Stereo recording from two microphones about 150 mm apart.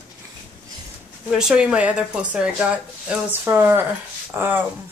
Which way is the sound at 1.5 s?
5° right (ahead or behind).